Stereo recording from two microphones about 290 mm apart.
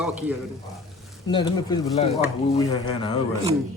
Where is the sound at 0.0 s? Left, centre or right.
Centre.